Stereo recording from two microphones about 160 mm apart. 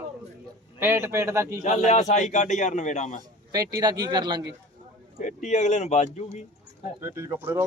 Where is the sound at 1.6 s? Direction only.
45° left (ahead or behind).